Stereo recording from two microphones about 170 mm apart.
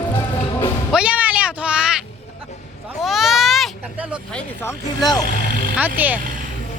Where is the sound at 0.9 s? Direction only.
5° right (ahead or behind).